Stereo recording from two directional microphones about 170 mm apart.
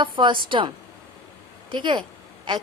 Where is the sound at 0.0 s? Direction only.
30° right (ahead or behind).